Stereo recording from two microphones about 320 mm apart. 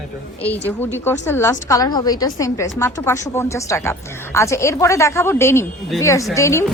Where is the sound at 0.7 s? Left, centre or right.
Centre.